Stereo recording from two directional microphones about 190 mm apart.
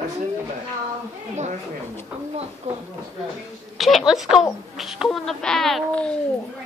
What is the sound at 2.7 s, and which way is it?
Speech, 35° right (ahead or behind).